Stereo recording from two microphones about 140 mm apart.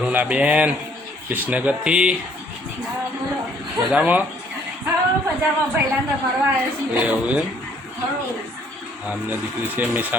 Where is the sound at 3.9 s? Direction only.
10° right (ahead or behind).